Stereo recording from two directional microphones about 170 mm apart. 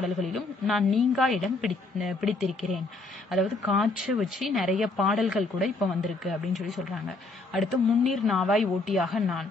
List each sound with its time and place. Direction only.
0.0 s a woman's voice: centre (ahead or behind)